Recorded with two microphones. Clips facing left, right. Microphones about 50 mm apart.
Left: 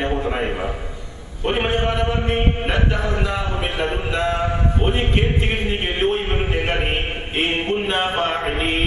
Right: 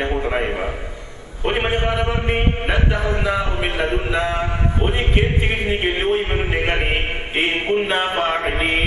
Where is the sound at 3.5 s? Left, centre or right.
Right.